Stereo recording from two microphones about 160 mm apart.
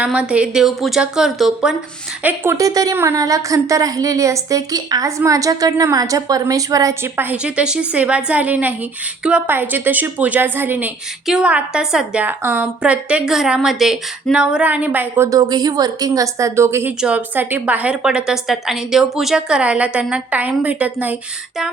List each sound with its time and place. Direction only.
0.0 s speech: 5° right (ahead or behind)
2.2 s a woman's voice: 15° right (ahead or behind)
15.3 s a woman's voice: 25° right (ahead or behind)